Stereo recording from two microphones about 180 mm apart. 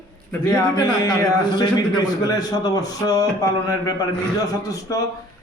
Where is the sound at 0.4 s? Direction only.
25° left (ahead or behind).